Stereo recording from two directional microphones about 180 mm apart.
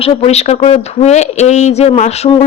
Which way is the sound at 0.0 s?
35° left (ahead or behind).